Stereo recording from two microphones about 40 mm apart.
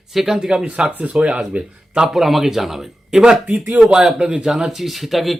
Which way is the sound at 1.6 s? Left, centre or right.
Right.